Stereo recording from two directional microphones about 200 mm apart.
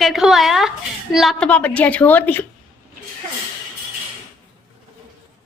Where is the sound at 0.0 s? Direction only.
Centre (ahead or behind).